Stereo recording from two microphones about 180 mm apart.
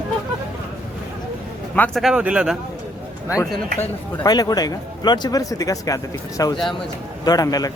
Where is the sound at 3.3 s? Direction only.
15° left (ahead or behind).